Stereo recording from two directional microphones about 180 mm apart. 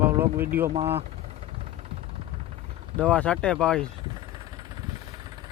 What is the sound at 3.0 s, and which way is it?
Speech, 5° left (ahead or behind).